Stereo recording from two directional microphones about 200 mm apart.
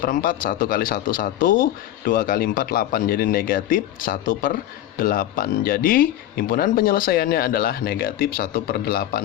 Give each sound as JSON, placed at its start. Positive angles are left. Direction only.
{"t": 0.0, "sound": "a man's voice", "side_deg": 45}